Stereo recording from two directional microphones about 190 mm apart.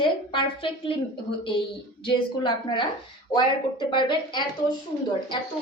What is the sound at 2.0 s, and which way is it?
A woman's voice, 25° left (ahead or behind).